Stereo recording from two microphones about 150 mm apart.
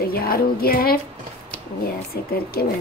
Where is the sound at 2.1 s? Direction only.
90° left.